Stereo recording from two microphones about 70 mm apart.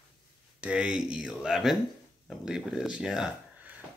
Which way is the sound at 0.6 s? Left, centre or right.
Centre.